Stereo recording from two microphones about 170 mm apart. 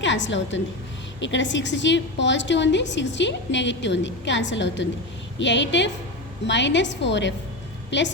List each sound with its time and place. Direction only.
0.0 s a woman's voice: 90° left